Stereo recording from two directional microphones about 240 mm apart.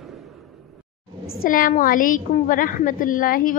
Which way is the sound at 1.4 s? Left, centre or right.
Left.